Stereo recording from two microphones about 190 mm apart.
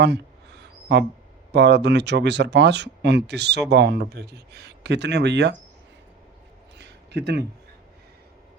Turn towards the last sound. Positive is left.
turn(degrees=-60)  # may be behind; listen again after turning